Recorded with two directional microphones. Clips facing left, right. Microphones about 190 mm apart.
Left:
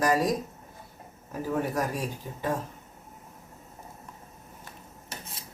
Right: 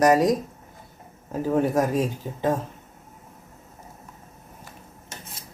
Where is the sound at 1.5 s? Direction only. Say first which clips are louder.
Right 7 dB; 20° right (ahead or behind).